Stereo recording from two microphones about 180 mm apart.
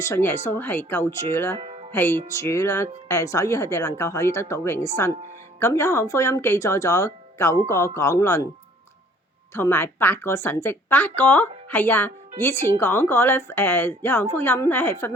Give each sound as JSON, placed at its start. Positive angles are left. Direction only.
{"t": 0.0, "sound": "a woman's voice", "side_deg": 15}
{"t": 9.6, "sound": "a woman's voice", "side_deg": 15}